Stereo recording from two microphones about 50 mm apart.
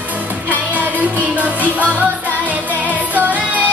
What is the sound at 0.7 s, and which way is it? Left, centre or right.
Music, right.